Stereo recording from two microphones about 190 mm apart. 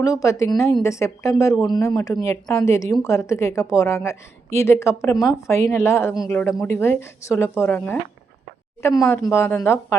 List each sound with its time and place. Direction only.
0.0 s speech: 15° left (ahead or behind)